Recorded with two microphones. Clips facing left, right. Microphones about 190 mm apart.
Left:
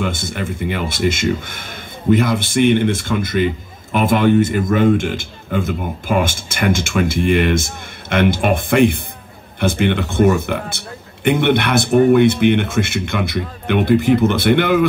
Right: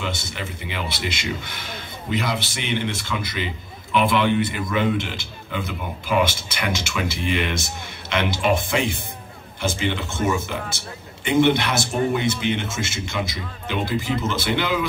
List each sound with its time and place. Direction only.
0.0 s a man's voice: 50° left (ahead or behind)